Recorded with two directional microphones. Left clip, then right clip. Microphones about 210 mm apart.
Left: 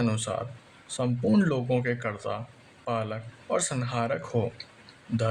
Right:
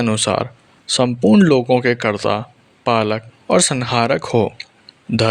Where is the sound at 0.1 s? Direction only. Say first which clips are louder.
Right 14 dB; 40° right (ahead or behind).